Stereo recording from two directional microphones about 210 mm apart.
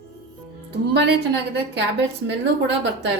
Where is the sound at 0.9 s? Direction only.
55° right (ahead or behind).